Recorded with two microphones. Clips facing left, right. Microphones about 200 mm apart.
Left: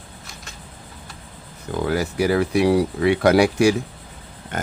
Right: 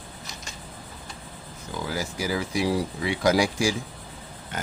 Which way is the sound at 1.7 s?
60° left (ahead or behind).